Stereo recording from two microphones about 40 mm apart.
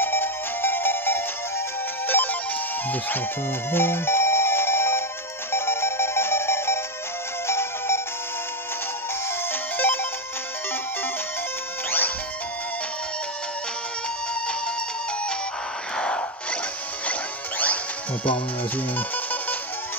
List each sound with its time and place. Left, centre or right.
0.0 s music: left
2.0 s music: left
2.9 s speech: left
3.7 s music: left
9.5 s music: left
16.0 s a sound: left
17.1 s music: left